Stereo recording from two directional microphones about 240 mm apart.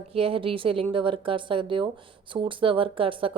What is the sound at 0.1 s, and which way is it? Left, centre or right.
Speech, right.